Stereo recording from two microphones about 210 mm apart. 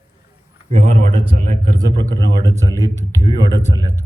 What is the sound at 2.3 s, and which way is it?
Speech, 15° left (ahead or behind).